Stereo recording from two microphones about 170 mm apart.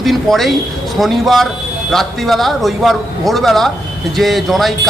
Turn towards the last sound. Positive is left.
turn(degrees=0)  # may be behind; listen again after turning